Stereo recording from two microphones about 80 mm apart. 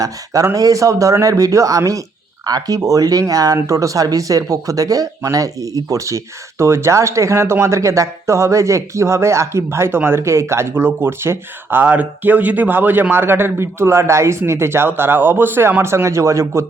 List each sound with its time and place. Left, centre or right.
0.5 s speech: right